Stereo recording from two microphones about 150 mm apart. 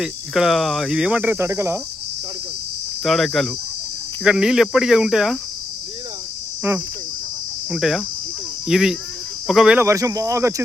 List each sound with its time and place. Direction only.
0.0 s cricket: 5° right (ahead or behind)
3.0 s cricket: centre (ahead or behind)
6.6 s insect: 10° right (ahead or behind)
7.7 s cricket: 5° right (ahead or behind)
9.8 s speech: 20° right (ahead or behind)